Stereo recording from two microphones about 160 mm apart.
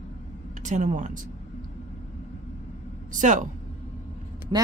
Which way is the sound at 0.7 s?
50° right (ahead or behind).